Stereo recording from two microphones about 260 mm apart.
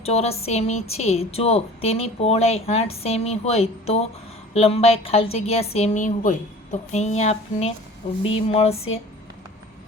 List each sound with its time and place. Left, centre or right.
0.0 s a woman's voice: left